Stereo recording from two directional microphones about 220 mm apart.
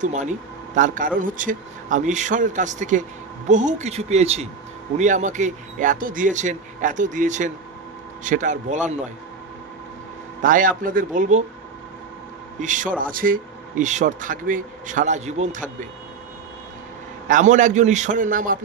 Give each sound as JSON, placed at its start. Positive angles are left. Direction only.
{"t": 0.0, "sound": "a man's voice", "side_deg": -35}
{"t": 10.4, "sound": "a man's voice", "side_deg": -40}
{"t": 12.5, "sound": "a man's voice", "side_deg": -35}
{"t": 17.3, "sound": "a man's voice", "side_deg": -35}